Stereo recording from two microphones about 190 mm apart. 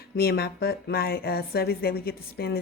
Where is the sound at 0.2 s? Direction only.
55° left (ahead or behind).